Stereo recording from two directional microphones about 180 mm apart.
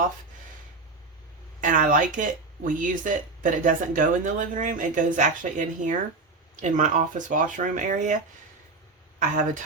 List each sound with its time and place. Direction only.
1.6 s speech: 45° right (ahead or behind)
9.1 s speech: 45° right (ahead or behind)